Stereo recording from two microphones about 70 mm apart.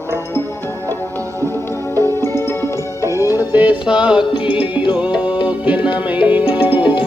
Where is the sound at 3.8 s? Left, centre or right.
Centre.